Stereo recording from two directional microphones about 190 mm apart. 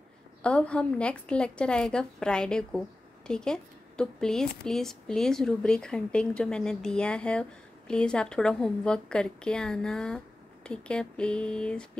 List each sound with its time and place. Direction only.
0.4 s a woman's voice: 5° left (ahead or behind)